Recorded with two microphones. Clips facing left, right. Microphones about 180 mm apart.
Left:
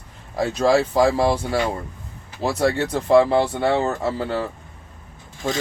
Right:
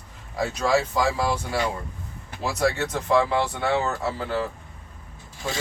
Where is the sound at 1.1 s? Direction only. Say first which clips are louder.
Left 6 dB; 30° left (ahead or behind).